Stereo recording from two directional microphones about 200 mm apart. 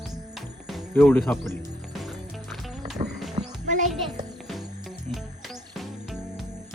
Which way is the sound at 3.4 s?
40° right (ahead or behind).